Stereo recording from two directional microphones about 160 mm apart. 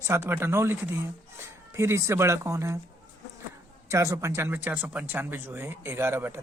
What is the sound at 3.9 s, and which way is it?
Speech, 15° right (ahead or behind).